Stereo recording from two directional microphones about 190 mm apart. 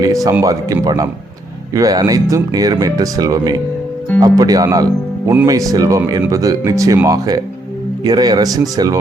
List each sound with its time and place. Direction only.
0.0 s speech: 20° right (ahead or behind)